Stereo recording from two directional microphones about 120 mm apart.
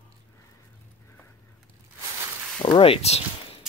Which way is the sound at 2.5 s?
50° left (ahead or behind).